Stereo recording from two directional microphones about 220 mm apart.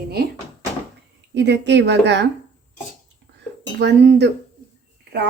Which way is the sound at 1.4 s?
50° right (ahead or behind).